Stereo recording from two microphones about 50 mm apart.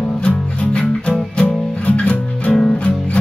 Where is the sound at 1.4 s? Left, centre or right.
Left.